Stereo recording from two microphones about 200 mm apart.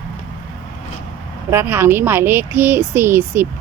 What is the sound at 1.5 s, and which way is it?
Speech, 10° right (ahead or behind).